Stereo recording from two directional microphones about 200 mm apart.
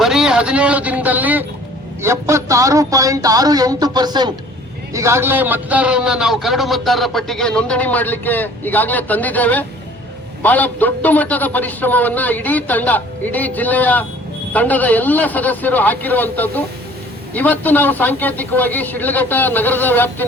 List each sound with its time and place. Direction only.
0.0 s a man's voice: 5° right (ahead or behind)